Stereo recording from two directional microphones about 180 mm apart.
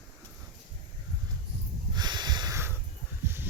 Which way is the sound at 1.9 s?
25° right (ahead or behind).